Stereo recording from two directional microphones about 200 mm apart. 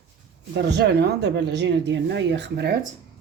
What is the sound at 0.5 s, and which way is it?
Speech, 55° right (ahead or behind).